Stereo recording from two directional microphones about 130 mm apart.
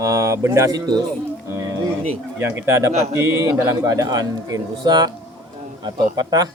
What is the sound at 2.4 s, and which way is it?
Speech, 20° right (ahead or behind).